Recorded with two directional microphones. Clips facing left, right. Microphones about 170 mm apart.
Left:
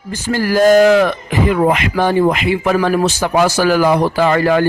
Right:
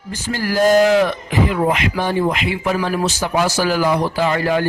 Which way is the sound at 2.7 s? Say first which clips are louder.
Left 5 dB; 65° left (ahead or behind).